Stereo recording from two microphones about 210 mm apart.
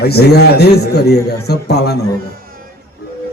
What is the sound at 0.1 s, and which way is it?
A man's voice, 50° left (ahead or behind).